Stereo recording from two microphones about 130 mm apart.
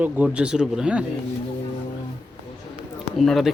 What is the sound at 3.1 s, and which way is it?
Speech, centre (ahead or behind).